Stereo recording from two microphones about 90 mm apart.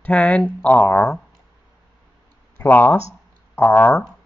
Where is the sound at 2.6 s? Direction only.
20° left (ahead or behind).